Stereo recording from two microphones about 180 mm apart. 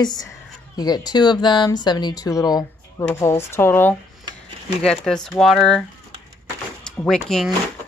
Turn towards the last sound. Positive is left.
turn(degrees=0)  # may be behind; listen again after turning